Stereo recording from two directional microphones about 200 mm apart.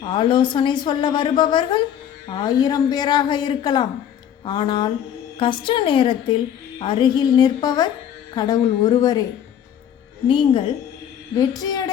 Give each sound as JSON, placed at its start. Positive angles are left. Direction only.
{"t": 0.0, "sound": "a woman's voice", "side_deg": 25}
{"t": 10.2, "sound": "a woman's voice", "side_deg": 25}